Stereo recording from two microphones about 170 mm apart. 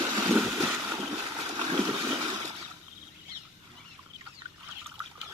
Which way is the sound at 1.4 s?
40° right (ahead or behind).